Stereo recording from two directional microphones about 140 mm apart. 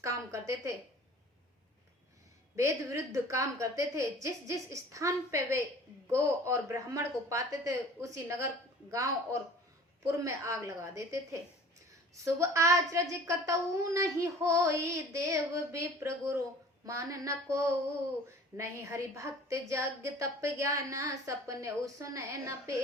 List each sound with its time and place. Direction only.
0.0 s a sound: 20° right (ahead or behind)
2.6 s a woman's voice: 20° right (ahead or behind)
12.2 s a woman's voice: 20° right (ahead or behind)